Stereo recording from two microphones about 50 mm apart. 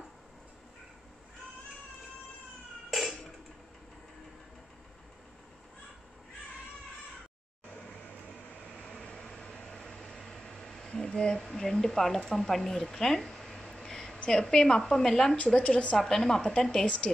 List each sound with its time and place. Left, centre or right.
8.8 s vehicle: centre
9.8 s a sound: centre
14.4 s a woman's voice: centre
15.3 s a woman's voice: left
16.0 s a woman's voice: centre